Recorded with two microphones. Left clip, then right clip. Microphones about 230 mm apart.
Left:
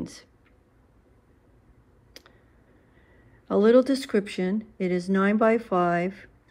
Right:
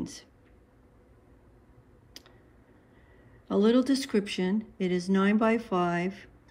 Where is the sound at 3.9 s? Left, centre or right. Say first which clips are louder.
Left 2 dB; centre.